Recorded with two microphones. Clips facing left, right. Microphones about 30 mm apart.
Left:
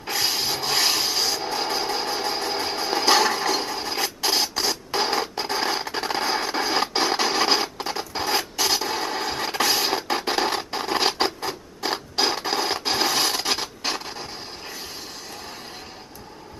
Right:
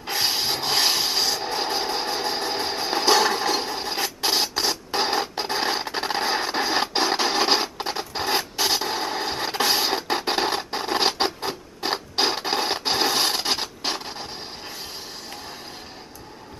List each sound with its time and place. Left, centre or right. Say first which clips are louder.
0.1 s rub: right 1 dB; centre
0.7 s rub: even; centre
1.4 s vehicle: even; centre
3.2 s a sound: even; centre
3.4 s mechanisms: even; right
4.3 s a sound: right 1 dB; centre
5.4 s scratch: even; centre
7.2 s a sound: even; right
11.0 s scratch: even; centre
13.0 s rub: even; right